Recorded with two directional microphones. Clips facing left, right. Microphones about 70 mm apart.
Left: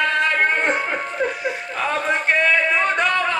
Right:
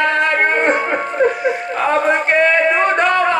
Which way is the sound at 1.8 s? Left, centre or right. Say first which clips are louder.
Right 6 dB; right.